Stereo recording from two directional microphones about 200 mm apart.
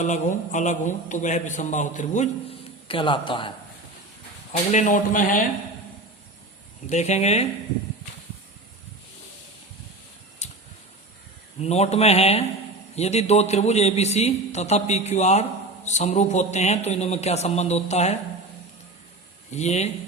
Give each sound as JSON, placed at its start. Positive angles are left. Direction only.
{"t": 0.0, "sound": "a man's voice", "side_deg": 40}
{"t": 4.5, "sound": "a man's voice", "side_deg": 35}
{"t": 6.9, "sound": "a man's voice", "side_deg": 35}
{"t": 10.4, "sound": "a sound", "side_deg": 35}
{"t": 11.6, "sound": "a man's voice", "side_deg": 30}
{"t": 19.5, "sound": "a man's voice", "side_deg": 35}